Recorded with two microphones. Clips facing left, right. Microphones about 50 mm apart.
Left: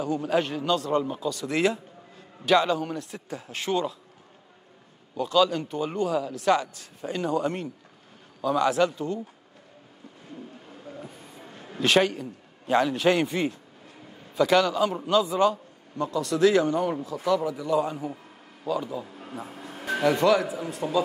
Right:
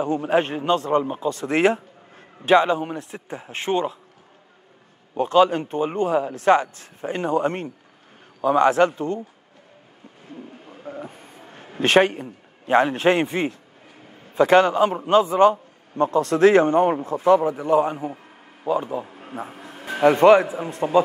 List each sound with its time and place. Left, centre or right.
0.0 s a man's voice: right
2.5 s a man's voice: right
5.1 s a man's voice: right
10.7 s a sound: right
11.1 s a sound: right
11.8 s a man's voice: right
19.0 s a sound: right
19.7 s music: centre
20.0 s a man's voice: right